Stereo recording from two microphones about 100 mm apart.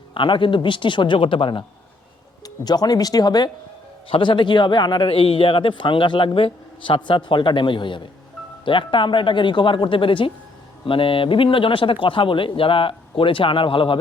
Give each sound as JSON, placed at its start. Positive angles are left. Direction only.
{"t": 0.1, "sound": "speech", "side_deg": 55}
{"t": 2.4, "sound": "speech", "side_deg": 40}
{"t": 4.1, "sound": "speech", "side_deg": 55}